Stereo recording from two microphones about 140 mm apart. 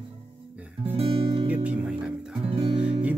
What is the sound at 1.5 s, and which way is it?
Music, 10° right (ahead or behind).